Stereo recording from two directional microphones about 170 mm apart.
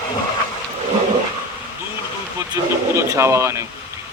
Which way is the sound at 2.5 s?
15° right (ahead or behind).